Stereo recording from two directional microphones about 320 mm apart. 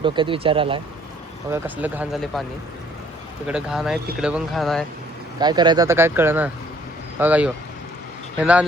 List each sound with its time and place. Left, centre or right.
0.0 s speech: centre
3.4 s speech: centre
5.4 s speech: centre